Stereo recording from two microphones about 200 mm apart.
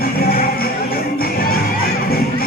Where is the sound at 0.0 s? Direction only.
50° left (ahead or behind).